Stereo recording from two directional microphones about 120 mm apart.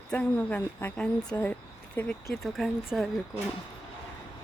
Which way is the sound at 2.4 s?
Centre (ahead or behind).